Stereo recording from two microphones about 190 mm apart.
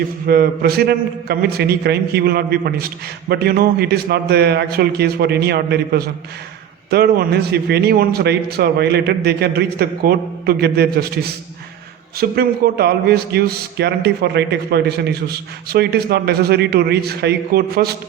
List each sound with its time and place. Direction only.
0.3 s a man's voice: 55° right (ahead or behind)